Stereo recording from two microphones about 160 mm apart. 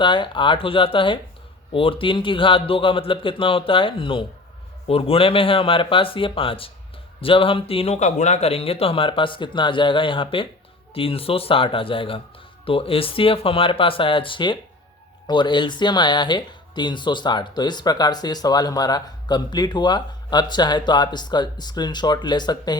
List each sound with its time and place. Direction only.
0.0 s speech: 30° left (ahead or behind)